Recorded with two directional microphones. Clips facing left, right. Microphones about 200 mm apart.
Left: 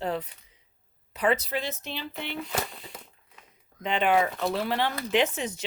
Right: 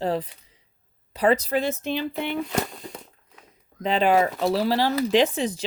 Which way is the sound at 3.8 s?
35° right (ahead or behind).